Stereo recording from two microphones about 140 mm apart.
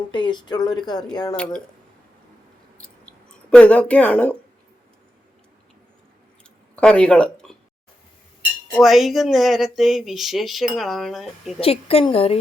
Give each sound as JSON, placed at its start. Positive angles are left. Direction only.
{"t": 0.1, "sound": "speech", "side_deg": 35}
{"t": 2.7, "sound": "clicking", "side_deg": 10}
{"t": 6.7, "sound": "speech", "side_deg": 5}
{"t": 8.8, "sound": "speech", "side_deg": 0}
{"t": 11.6, "sound": "a woman's voice", "side_deg": 45}